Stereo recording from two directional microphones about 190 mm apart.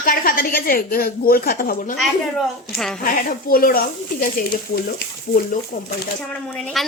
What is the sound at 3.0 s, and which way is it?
A woman's voice, 50° left (ahead or behind).